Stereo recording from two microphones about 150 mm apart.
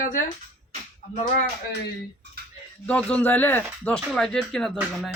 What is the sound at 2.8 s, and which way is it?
Speech, 10° left (ahead or behind).